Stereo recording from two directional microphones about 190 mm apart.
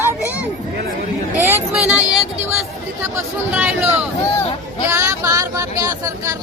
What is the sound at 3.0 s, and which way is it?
Speech, 10° right (ahead or behind).